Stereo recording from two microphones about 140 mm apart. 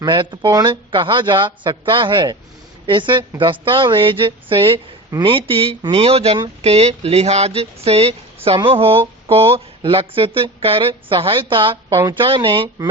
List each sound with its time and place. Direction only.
0.0 s speech: 35° right (ahead or behind)